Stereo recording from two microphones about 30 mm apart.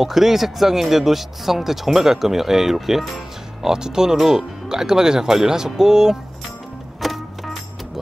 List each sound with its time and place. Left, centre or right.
0.0 s speech: centre
7.0 s music: centre